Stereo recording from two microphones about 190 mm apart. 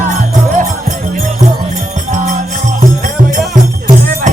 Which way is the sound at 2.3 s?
40° right (ahead or behind).